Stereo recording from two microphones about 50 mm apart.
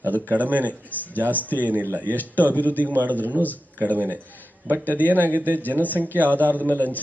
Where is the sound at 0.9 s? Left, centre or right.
Left.